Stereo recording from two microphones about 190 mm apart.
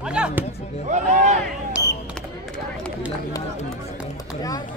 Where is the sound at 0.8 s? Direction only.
40° right (ahead or behind).